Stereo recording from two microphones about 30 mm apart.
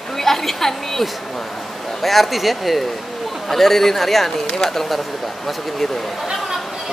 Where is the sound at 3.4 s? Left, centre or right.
Centre.